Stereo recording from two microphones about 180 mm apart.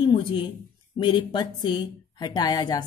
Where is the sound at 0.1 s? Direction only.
25° left (ahead or behind).